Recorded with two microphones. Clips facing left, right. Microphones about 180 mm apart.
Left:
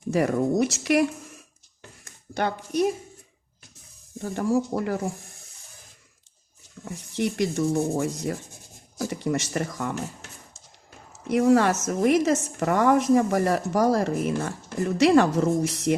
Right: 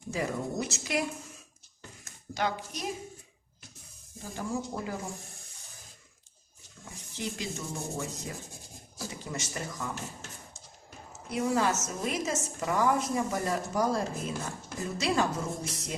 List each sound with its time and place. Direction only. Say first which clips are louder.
0.1 s speech: left 10 dB; 65° left (ahead or behind)
2.3 s speech: left 6 dB; 60° left (ahead or behind)
4.2 s a woman's voice: left 10 dB; 70° left (ahead or behind)
7.1 s a woman's voice: left 11 dB; 70° left (ahead or behind)
11.3 s a woman's voice: left 9 dB; 75° left (ahead or behind)